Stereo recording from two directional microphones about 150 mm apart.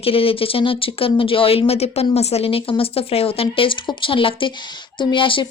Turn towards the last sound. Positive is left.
turn(degrees=35)  # may be behind; listen again after turning